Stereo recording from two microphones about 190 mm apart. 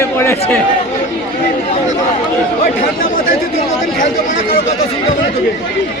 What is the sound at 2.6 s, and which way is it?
Speech, 50° left (ahead or behind).